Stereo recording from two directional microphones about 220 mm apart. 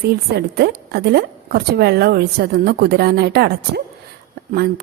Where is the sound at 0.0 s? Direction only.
45° right (ahead or behind).